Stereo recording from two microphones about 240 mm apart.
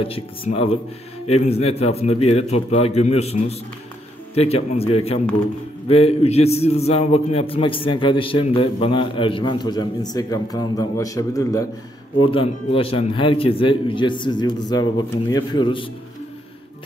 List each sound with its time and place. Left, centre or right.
0.0 s a man's voice: left